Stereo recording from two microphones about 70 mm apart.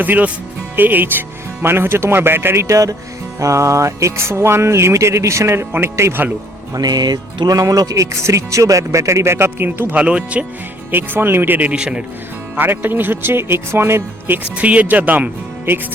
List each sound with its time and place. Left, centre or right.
0.0 s speech: right
1.6 s music: right
2.6 s music: right
6.7 s music: right
9.9 s speech: centre
10.9 s speech: right
11.8 s speech: centre
12.5 s music: right
14.5 s speech: right